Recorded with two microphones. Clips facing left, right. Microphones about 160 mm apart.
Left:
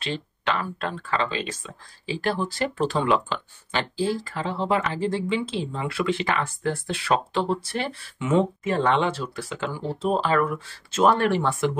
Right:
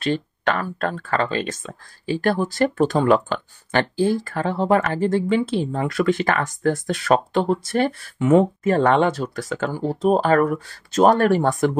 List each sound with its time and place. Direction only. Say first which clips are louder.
0.0 s speech: right 7 dB; 45° right (ahead or behind)